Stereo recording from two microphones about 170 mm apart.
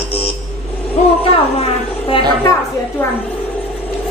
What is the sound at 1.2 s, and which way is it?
Speech, 35° left (ahead or behind).